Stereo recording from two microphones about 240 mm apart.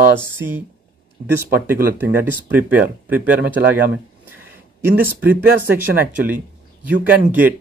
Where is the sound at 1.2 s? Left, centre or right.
Right.